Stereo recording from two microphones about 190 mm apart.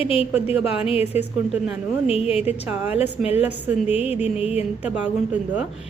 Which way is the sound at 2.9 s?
30° left (ahead or behind).